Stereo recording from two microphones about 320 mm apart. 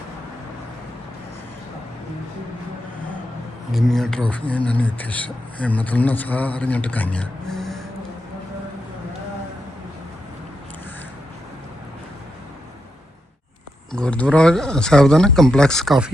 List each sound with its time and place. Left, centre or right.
3.7 s speech: centre
13.9 s speech: centre